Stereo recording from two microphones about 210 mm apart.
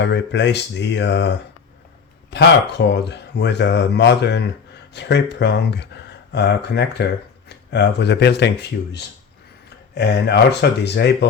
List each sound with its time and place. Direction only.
0.0 s speech: 55° left (ahead or behind)
2.3 s speech: 55° left (ahead or behind)
9.9 s speech: 55° left (ahead or behind)